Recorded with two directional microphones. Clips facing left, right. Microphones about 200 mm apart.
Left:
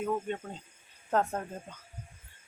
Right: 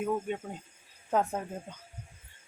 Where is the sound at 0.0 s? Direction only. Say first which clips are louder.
Right 1 dB; 10° right (ahead or behind).